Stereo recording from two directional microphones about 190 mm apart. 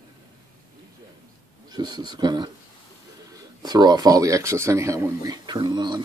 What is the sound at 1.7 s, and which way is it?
Speech, 20° right (ahead or behind).